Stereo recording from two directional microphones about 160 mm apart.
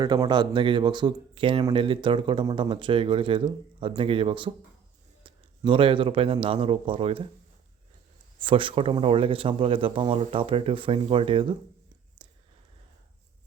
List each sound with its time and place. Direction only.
0.0 s speech: 25° right (ahead or behind)
8.4 s speech: 30° right (ahead or behind)
12.2 s whispering: 30° right (ahead or behind)